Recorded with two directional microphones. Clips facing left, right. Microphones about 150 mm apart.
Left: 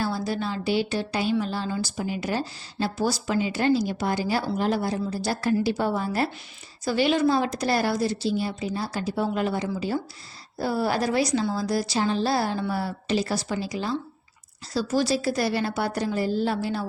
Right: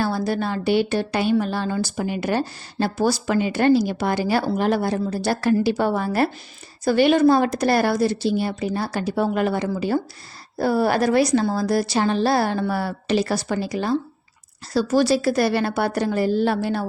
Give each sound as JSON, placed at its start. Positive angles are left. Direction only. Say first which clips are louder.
{"t": 0.0, "sound": "a woman's voice", "louder": "right 4 dB", "side_deg": -60}